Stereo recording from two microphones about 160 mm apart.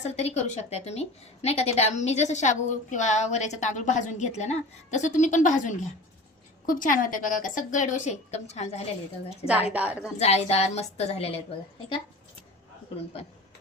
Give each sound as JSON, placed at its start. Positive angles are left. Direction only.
{"t": 0.0, "sound": "a woman's voice", "side_deg": 45}
{"t": 9.7, "sound": "a woman's voice", "side_deg": -10}
{"t": 10.2, "sound": "speech", "side_deg": 40}